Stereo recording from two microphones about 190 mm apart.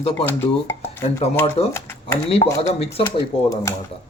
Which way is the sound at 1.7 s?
15° left (ahead or behind).